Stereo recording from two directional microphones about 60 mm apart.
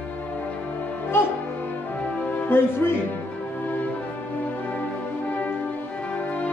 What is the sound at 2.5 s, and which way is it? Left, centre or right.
Music, left.